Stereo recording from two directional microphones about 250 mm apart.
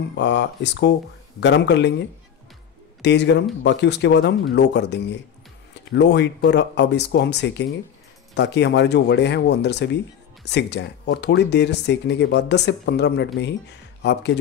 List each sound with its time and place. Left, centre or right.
0.2 s speech: left
3.0 s speech: left